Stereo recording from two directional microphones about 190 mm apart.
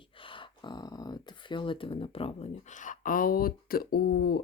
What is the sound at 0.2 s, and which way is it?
Speech, 25° left (ahead or behind).